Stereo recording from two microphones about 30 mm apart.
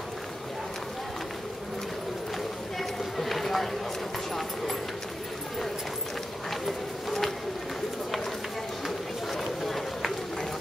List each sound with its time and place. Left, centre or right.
2.8 s run: centre
6.5 s run: centre
9.4 s run: centre